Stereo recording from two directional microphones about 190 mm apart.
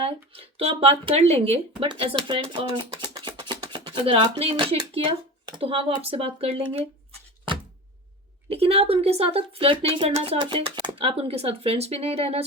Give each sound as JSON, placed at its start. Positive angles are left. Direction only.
{"t": 0.0, "sound": "speech", "side_deg": -30}
{"t": 8.4, "sound": "speech", "side_deg": -30}